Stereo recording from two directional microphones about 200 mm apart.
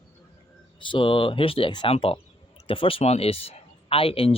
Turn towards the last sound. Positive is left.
turn(degrees=30)  # may be behind; listen again after turning